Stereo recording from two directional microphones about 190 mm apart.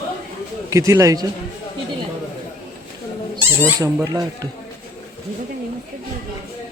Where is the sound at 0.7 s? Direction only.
15° right (ahead or behind).